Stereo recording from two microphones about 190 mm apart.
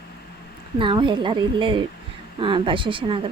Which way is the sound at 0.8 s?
25° right (ahead or behind).